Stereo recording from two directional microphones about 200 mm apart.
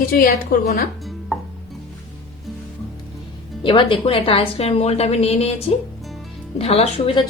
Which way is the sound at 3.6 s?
25° left (ahead or behind).